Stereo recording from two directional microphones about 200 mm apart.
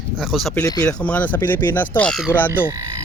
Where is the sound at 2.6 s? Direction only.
20° right (ahead or behind).